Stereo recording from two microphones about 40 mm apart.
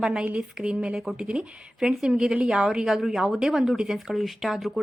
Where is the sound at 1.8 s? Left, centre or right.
Centre.